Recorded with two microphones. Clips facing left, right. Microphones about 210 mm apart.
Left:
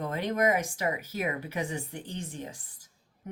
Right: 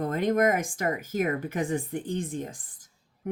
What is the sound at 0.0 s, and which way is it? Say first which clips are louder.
Speech: right 4 dB; 50° right (ahead or behind).